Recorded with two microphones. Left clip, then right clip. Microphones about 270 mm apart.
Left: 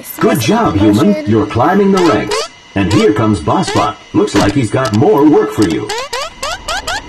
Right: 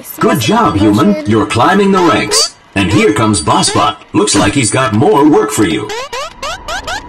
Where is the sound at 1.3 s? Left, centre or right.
Right.